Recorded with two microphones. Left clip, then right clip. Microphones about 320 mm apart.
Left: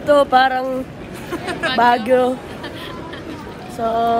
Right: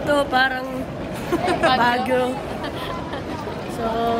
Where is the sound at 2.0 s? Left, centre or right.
Left.